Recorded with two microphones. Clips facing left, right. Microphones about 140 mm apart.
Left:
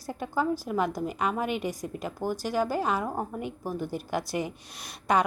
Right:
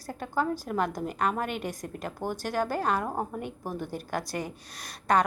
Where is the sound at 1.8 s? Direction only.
5° left (ahead or behind).